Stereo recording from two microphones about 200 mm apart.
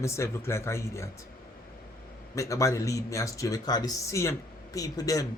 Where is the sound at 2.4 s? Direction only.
15° left (ahead or behind).